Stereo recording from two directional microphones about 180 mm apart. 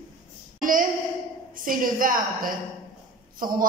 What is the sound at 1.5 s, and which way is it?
A woman's voice, 50° right (ahead or behind).